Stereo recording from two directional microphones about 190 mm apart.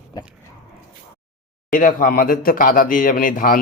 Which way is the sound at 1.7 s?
45° left (ahead or behind).